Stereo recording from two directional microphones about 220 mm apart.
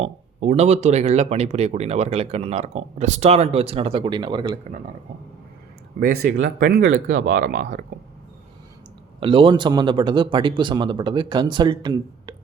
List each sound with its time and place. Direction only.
0.0 s speech: 30° right (ahead or behind)
6.0 s speech: 40° right (ahead or behind)
6.9 s speech: 60° right (ahead or behind)
9.2 s speech: 25° right (ahead or behind)